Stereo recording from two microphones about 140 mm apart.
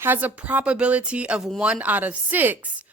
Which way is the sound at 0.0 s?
15° right (ahead or behind).